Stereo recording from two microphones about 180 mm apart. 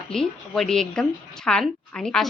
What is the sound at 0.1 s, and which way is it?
A woman's voice, centre (ahead or behind).